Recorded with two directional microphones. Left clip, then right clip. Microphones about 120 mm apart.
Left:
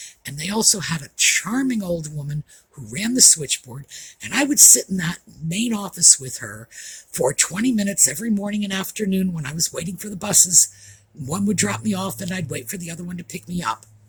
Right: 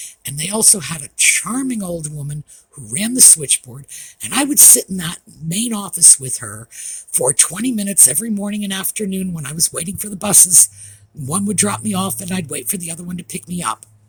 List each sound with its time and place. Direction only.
0.0 s speech: 35° right (ahead or behind)